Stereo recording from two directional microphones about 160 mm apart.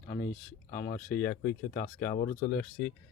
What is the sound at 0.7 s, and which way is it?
Speech, 70° left (ahead or behind).